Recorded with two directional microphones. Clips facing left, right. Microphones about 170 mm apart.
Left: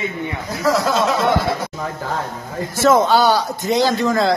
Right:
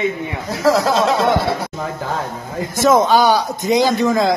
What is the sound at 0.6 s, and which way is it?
Speech, 30° right (ahead or behind).